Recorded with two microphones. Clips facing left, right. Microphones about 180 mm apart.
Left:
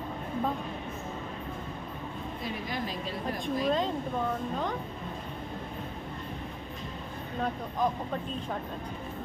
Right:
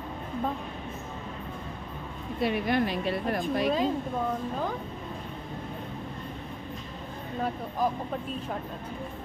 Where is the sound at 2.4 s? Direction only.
65° right (ahead or behind).